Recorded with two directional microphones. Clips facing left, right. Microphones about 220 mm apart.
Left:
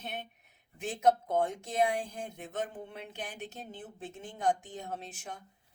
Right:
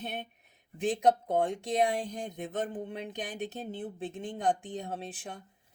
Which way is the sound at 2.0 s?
40° right (ahead or behind).